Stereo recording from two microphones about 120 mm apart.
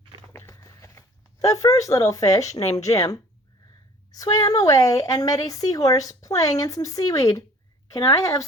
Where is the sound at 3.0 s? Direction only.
30° left (ahead or behind).